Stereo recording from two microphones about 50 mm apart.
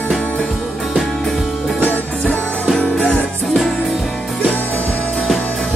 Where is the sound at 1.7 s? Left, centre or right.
Left.